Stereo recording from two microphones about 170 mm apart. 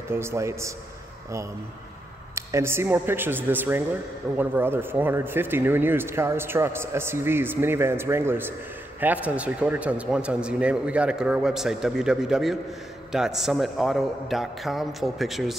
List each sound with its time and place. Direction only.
0.1 s speech: 15° right (ahead or behind)
2.3 s a man's voice: 15° right (ahead or behind)